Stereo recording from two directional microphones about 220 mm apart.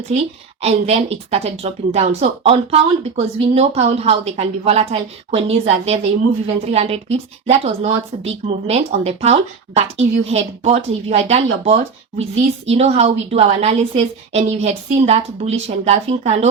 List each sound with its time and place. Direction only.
0.6 s speech: 30° right (ahead or behind)